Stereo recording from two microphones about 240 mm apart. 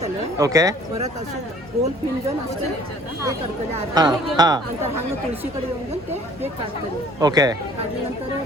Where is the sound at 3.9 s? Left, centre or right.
Centre.